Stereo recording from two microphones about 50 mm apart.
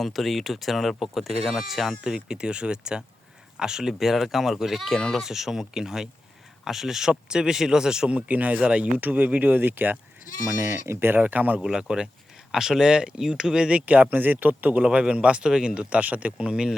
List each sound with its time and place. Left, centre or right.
0.0 s speech: centre
2.1 s speech: centre
5.2 s speech: centre
8.3 s speech: right
10.4 s speech: right
11.1 s speech: right
11.6 s speech: centre
13.8 s speech: right
14.8 s a man's voice: centre